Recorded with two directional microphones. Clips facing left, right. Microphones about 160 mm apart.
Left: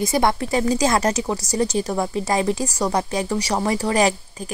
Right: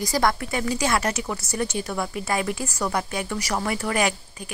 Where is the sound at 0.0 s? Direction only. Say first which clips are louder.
Left 3 dB; 25° left (ahead or behind).